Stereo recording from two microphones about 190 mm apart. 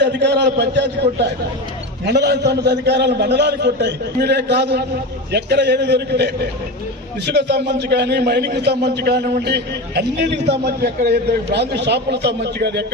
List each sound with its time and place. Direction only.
0.0 s a man's voice: 65° right (ahead or behind)